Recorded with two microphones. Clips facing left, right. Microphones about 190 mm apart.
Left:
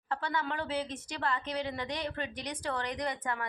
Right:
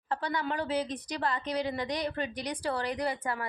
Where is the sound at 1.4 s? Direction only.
10° right (ahead or behind).